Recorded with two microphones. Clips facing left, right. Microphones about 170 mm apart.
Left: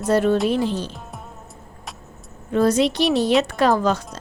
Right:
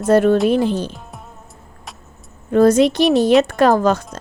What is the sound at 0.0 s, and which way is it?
Speech, 50° right (ahead or behind).